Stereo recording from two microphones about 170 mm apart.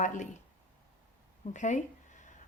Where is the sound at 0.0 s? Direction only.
45° left (ahead or behind).